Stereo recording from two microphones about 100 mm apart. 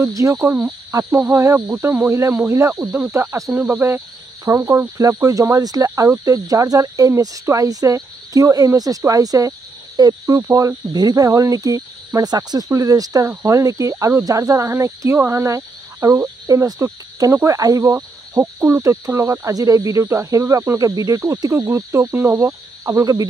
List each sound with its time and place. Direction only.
0.0 s speech: 35° right (ahead or behind)
1.3 s speech: 30° right (ahead or behind)